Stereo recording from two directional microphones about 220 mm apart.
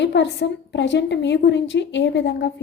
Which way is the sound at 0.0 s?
55° left (ahead or behind).